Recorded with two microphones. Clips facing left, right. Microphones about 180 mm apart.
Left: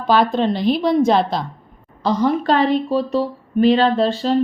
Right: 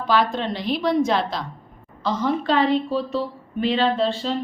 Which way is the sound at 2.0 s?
40° left (ahead or behind).